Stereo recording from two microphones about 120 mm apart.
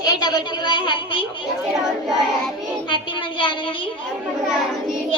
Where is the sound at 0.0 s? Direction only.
35° left (ahead or behind).